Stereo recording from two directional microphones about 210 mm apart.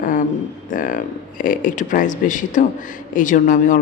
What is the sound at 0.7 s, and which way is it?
Speech, 40° left (ahead or behind).